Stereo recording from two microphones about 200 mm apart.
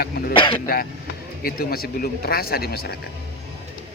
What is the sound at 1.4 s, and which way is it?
A man's voice, 50° left (ahead or behind).